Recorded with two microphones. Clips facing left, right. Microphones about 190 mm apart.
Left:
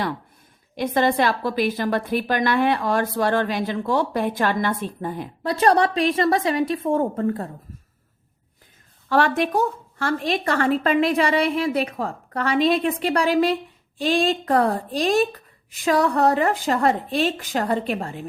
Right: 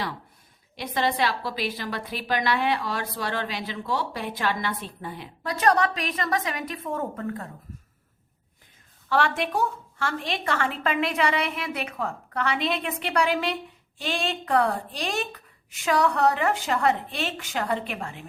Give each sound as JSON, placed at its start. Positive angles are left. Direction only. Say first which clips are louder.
{"t": 0.8, "sound": "a woman's voice", "louder": "left 6 dB", "side_deg": 50}
{"t": 5.4, "sound": "speech", "louder": "left 4 dB", "side_deg": 30}
{"t": 9.0, "sound": "speech", "louder": "left 5 dB", "side_deg": 45}